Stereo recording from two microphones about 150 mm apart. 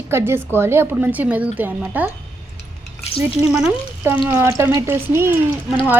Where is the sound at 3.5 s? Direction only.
10° right (ahead or behind).